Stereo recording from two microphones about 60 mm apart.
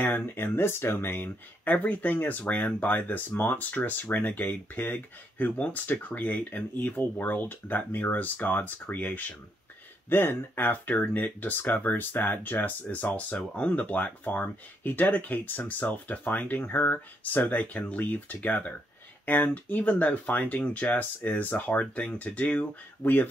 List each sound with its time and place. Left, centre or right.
0.0 s speech: left
10.0 s speech: left